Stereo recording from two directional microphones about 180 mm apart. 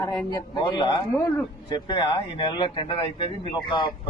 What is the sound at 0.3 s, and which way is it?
Speech, 25° left (ahead or behind).